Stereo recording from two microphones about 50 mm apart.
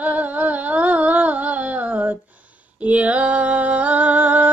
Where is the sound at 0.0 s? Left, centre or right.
Right.